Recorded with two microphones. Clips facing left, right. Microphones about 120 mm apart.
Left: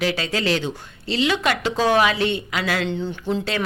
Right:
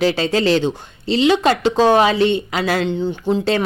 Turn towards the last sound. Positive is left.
turn(degrees=-15)  # may be behind; listen again after turning